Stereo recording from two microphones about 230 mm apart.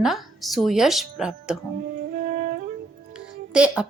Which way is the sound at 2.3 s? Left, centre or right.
Right.